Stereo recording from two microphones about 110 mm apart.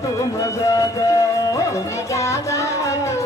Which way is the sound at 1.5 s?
25° left (ahead or behind).